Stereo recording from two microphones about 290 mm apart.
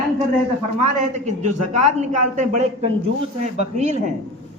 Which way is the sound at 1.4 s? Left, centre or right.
Right.